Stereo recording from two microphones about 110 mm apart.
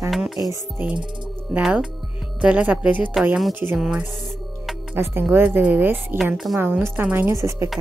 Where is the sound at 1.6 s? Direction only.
10° right (ahead or behind).